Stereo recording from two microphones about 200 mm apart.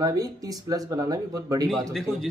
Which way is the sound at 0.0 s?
20° right (ahead or behind).